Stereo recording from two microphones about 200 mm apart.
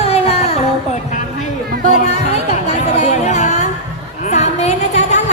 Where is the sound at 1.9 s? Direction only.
35° left (ahead or behind).